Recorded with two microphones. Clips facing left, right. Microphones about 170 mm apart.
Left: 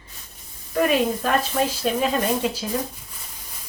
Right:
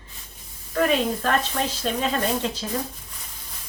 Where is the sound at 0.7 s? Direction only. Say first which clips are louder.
Left 2 dB; 15° left (ahead or behind).